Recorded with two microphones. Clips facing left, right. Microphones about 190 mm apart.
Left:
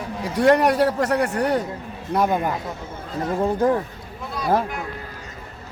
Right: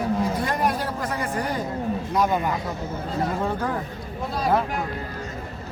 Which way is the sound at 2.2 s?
55° left (ahead or behind).